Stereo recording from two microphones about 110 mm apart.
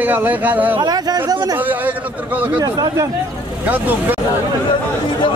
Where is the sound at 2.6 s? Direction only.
35° right (ahead or behind).